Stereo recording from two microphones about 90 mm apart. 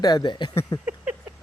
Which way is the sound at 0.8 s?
15° right (ahead or behind).